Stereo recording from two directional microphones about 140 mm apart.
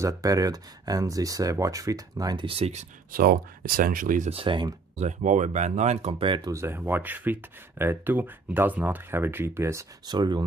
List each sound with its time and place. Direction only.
0.0 s speech: 25° right (ahead or behind)
2.4 s speech: 45° right (ahead or behind)
3.1 s speech: 90° right; by 4.3 s 70° right (ahead or behind)
4.3 s speech: 40° right (ahead or behind)
4.9 s speech: 60° right (ahead or behind); by 6.5 s 35° right (ahead or behind)
6.5 s speech: 15° right (ahead or behind)